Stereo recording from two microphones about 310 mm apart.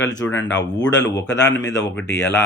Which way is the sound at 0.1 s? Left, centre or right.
Centre.